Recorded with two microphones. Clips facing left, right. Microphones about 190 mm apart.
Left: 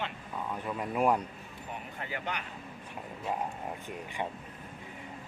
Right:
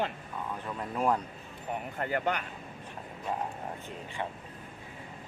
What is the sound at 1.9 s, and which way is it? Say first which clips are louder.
Speech: right 7 dB; 50° right (ahead or behind).